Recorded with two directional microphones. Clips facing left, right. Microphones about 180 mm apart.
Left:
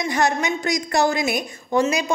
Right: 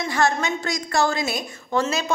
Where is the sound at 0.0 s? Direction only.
20° left (ahead or behind).